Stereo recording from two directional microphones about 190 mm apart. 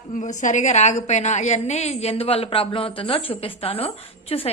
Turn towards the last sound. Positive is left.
turn(degrees=30)  # may be behind; listen again after turning